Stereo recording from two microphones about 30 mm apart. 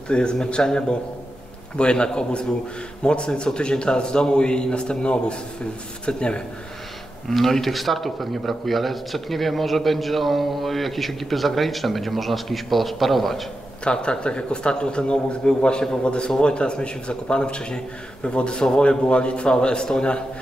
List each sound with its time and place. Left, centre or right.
0.1 s a man's voice: left
7.2 s a man's voice: centre
14.0 s a man's voice: left